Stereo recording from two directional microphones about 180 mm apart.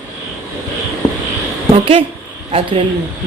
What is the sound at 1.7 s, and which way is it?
Speech, 30° right (ahead or behind).